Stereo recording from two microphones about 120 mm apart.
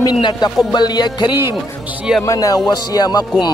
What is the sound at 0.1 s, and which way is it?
A man's voice, 35° left (ahead or behind).